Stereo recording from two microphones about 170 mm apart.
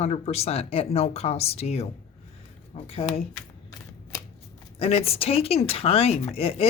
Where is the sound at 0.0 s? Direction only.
40° left (ahead or behind).